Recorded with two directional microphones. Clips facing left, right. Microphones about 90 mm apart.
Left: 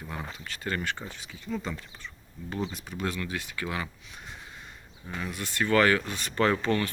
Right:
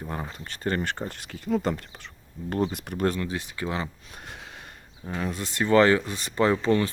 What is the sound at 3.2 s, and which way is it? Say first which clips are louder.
Speech: right 3 dB; 25° right (ahead or behind).